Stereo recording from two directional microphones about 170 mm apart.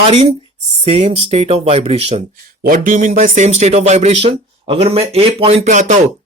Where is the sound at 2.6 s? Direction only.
50° right (ahead or behind).